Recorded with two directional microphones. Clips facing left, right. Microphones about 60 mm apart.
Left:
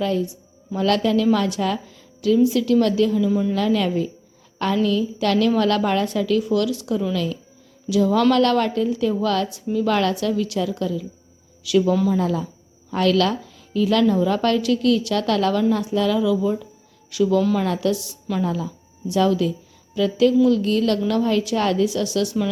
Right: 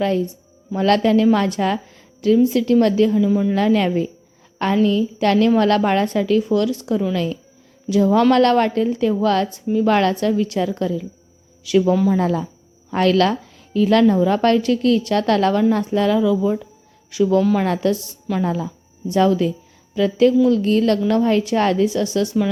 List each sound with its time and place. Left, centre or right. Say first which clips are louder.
0.0 s a woman's voice: right 3 dB; right
3.2 s speech: right 2 dB; centre
3.5 s a woman's voice: right 3 dB; right